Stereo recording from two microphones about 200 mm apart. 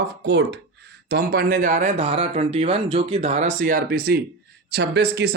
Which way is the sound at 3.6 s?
45° right (ahead or behind).